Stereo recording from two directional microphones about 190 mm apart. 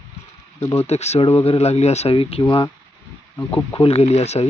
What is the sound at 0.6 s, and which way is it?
Speech, 15° left (ahead or behind).